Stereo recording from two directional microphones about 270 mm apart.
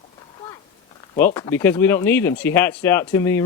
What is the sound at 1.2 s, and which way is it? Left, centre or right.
A woman's voice, centre.